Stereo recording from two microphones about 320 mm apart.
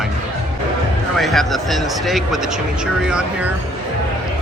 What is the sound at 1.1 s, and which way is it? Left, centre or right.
Speech, centre.